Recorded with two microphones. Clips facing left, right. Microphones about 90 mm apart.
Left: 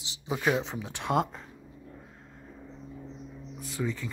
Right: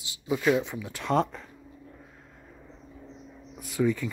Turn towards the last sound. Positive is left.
turn(degrees=20)  # may be behind; listen again after turning